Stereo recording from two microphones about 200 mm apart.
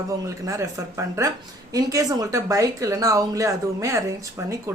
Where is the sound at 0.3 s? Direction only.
15° right (ahead or behind).